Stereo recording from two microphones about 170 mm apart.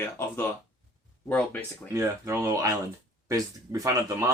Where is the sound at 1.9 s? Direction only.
15° right (ahead or behind).